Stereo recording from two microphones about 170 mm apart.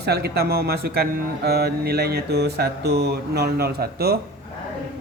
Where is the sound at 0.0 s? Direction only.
70° right (ahead or behind).